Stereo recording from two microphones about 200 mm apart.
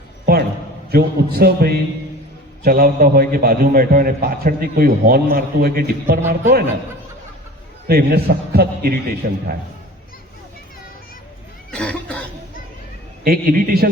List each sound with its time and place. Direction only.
0.3 s a man's voice: 50° right (ahead or behind)
7.9 s a man's voice: 50° right (ahead or behind)
11.7 s cough: 5° left (ahead or behind)
13.2 s a man's voice: 45° right (ahead or behind)